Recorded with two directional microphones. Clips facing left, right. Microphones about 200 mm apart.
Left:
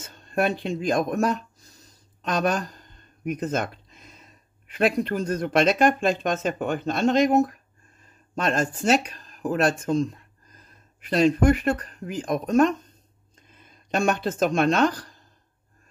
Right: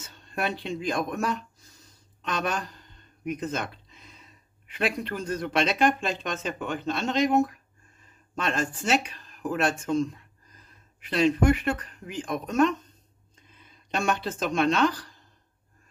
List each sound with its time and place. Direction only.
0.0 s speech: 45° left (ahead or behind)